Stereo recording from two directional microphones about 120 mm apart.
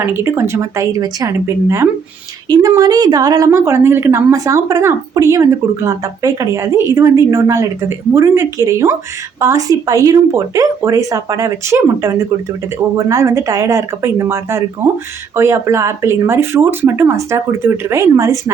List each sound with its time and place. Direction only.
0.0 s a woman's voice: 20° right (ahead or behind)